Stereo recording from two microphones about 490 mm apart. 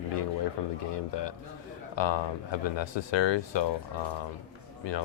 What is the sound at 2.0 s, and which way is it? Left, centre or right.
Speech, left.